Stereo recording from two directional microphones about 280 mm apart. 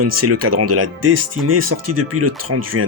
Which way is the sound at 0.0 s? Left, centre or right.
Right.